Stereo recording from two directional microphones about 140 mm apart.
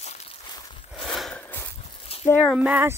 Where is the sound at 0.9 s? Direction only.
Centre (ahead or behind).